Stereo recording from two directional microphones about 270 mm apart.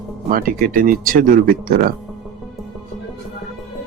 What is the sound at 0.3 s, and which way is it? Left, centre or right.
Speech, right.